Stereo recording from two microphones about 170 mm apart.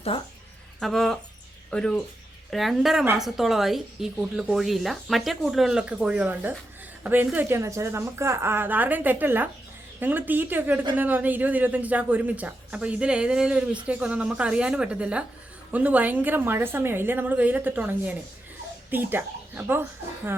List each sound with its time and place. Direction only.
0.8 s a woman's voice: centre (ahead or behind)